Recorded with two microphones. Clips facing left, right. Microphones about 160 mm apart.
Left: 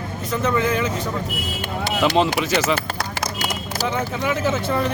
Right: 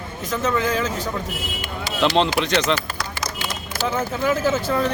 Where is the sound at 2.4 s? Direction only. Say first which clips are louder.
Even; 5° left (ahead or behind).